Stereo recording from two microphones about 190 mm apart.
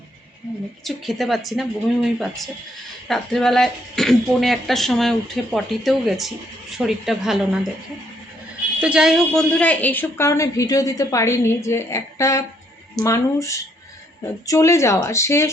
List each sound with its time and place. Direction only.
0.9 s speech: centre (ahead or behind)
8.8 s a woman's voice: 5° right (ahead or behind); by 15.4 s 15° left (ahead or behind)